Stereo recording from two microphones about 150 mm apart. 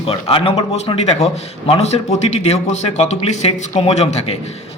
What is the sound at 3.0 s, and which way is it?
Speech, 45° left (ahead or behind).